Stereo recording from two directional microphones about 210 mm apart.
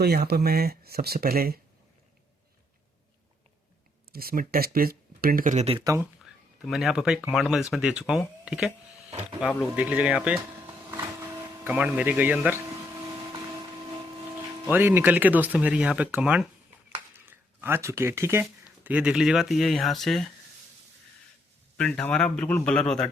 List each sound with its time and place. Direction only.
0.0 s speech: 50° right (ahead or behind)
4.1 s speech: 45° right (ahead or behind)
5.8 s speech: 15° right (ahead or behind)
6.7 s speech: centre (ahead or behind)
9.0 s a sound: 30° right (ahead or behind)
9.5 s speech: 5° right (ahead or behind)
10.9 s a sound: 10° right (ahead or behind)
14.6 s speech: 10° right (ahead or behind)
21.8 s speech: 5° left (ahead or behind)